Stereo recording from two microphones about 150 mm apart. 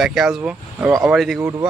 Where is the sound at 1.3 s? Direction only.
20° right (ahead or behind).